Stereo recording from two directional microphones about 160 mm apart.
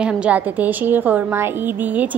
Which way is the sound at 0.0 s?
10° right (ahead or behind).